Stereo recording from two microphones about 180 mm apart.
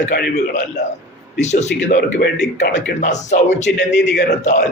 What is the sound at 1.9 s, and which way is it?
Speech, 55° left (ahead or behind).